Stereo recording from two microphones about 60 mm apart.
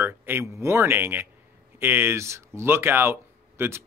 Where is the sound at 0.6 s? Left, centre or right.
Right.